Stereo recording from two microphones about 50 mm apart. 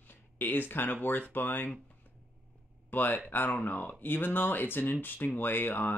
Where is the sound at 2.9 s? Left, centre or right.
Left.